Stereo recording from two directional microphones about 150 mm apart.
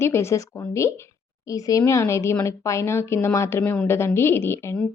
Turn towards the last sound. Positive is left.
turn(degrees=15)  # may be behind; listen again after turning